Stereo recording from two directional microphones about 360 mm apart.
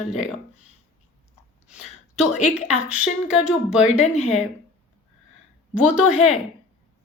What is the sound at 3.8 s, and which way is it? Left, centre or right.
Speech, centre.